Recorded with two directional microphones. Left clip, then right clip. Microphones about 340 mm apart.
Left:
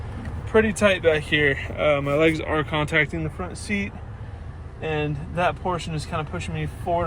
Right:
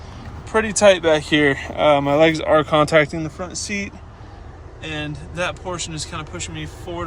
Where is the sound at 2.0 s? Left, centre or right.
Centre.